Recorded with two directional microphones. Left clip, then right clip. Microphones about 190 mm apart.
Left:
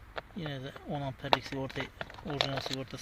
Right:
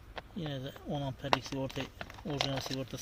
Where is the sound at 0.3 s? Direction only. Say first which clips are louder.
Right 4 dB; 10° right (ahead or behind).